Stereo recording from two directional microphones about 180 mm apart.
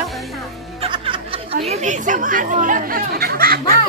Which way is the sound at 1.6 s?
40° right (ahead or behind).